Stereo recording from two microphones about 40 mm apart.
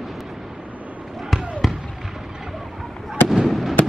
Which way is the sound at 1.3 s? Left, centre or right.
Centre.